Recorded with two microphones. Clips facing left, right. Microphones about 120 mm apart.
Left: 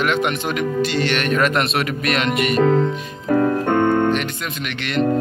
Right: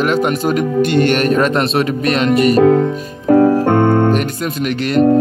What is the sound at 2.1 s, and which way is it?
Speech, 35° right (ahead or behind).